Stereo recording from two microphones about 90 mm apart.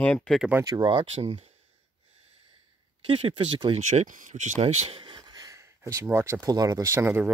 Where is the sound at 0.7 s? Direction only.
55° right (ahead or behind); by 1.4 s 90° right.